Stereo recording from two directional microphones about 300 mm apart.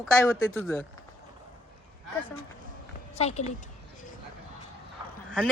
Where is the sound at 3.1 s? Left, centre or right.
Left.